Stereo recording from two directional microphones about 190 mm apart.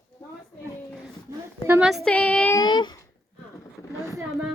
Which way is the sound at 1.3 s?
5° right (ahead or behind).